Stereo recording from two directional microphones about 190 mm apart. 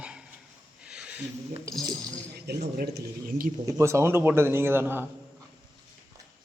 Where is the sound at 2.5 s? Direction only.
60° right (ahead or behind).